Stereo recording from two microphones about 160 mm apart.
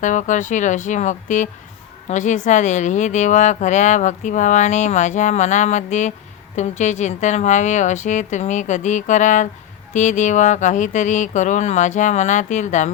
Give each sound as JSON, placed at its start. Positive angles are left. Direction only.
{"t": 0.0, "sound": "speech", "side_deg": 50}